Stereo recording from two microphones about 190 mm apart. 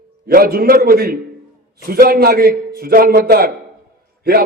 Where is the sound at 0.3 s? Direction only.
50° right (ahead or behind).